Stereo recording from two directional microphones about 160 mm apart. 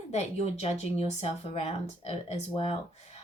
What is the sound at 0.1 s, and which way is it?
Speech, 45° left (ahead or behind).